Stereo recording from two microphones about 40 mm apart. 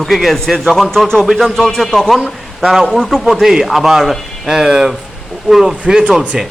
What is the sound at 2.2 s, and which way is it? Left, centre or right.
Speech, centre.